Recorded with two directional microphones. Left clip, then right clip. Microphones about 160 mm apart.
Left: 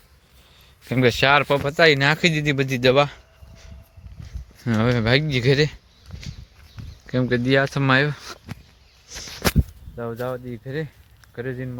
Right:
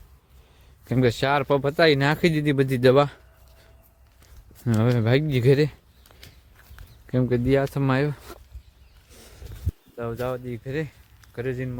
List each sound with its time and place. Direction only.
0.9 s speech: 10° right (ahead or behind)
1.5 s speech: 20° right (ahead or behind)
4.6 s speech: 15° right (ahead or behind)
7.1 s speech: 15° right (ahead or behind)
10.0 s speech: 5° right (ahead or behind)